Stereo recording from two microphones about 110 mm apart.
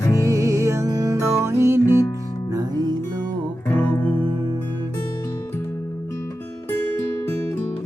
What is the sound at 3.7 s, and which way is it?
Music, 15° left (ahead or behind).